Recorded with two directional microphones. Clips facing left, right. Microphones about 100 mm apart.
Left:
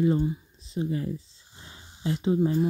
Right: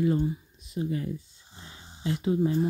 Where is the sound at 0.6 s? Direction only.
30° left (ahead or behind).